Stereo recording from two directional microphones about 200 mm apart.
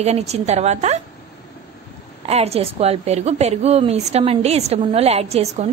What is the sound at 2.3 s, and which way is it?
A woman's voice, 30° right (ahead or behind).